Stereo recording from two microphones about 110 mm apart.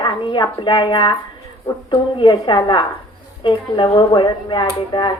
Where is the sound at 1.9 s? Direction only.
45° left (ahead or behind).